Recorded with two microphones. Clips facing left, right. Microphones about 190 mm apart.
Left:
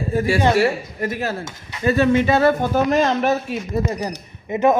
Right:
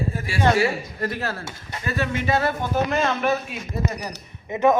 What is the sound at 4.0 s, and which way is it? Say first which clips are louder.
Speech: left 7 dB; 10° left (ahead or behind).